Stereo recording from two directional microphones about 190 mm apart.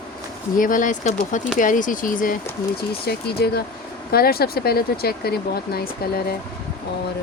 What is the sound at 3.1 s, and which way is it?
Speech, 55° left (ahead or behind).